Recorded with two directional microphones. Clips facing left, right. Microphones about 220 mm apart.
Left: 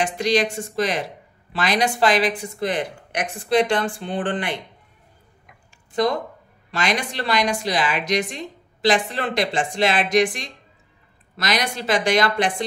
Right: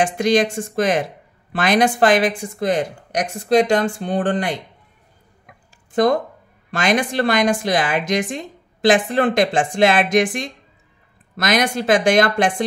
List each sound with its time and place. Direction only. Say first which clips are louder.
0.0 s speech: right 4 dB; 50° right (ahead or behind)
6.7 s speech: right 6 dB; 50° right (ahead or behind)